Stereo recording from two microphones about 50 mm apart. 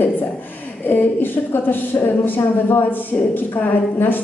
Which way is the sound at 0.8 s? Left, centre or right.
Left.